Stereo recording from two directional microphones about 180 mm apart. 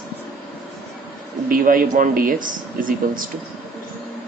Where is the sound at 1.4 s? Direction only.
50° right (ahead or behind).